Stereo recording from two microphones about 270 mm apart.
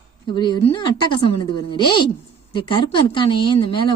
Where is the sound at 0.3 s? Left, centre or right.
Centre.